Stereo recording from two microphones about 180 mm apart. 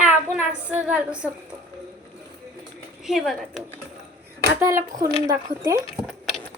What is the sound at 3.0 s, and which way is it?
Speech, centre (ahead or behind).